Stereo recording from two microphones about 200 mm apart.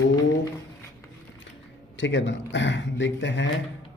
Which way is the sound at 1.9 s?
65° left (ahead or behind).